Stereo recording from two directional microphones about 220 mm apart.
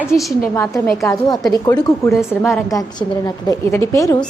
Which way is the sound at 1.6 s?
15° left (ahead or behind).